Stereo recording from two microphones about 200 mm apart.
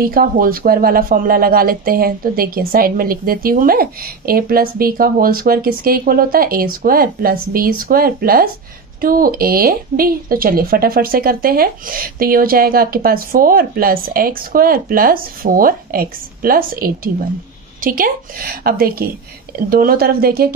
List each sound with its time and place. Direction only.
0.0 s speech: 45° right (ahead or behind)